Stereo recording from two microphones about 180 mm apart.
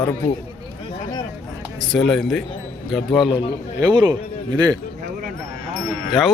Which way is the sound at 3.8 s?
20° right (ahead or behind).